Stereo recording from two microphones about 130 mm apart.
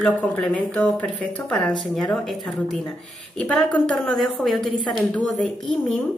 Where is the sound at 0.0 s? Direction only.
10° left (ahead or behind).